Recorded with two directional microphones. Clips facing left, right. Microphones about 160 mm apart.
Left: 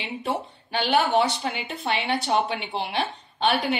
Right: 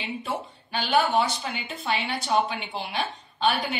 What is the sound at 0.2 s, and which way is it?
Speech, 65° left (ahead or behind).